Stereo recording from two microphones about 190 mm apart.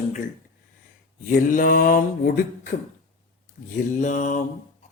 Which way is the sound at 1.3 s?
45° left (ahead or behind).